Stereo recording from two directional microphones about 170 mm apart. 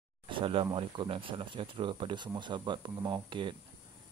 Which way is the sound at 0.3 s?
30° right (ahead or behind).